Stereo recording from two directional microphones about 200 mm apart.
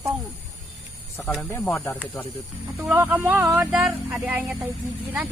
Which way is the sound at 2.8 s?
10° right (ahead or behind).